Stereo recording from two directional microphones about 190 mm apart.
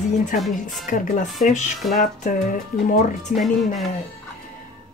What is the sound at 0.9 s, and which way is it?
Speech, 45° left (ahead or behind).